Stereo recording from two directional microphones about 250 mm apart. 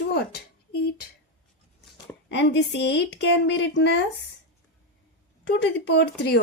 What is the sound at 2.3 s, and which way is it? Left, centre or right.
A woman's voice, left.